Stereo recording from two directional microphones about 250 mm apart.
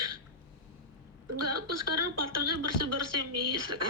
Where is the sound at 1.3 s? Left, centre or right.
Right.